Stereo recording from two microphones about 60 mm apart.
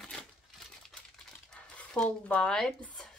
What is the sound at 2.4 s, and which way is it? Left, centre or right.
Speech, centre.